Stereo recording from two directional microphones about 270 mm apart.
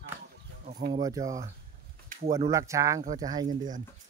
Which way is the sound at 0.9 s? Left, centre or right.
Centre.